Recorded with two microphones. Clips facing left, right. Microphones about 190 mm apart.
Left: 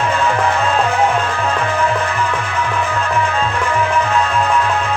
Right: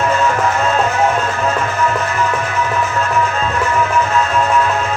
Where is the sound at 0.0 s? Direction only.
30° left (ahead or behind).